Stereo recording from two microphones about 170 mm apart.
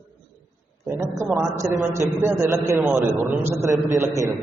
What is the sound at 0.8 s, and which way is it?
A man's voice, 15° right (ahead or behind).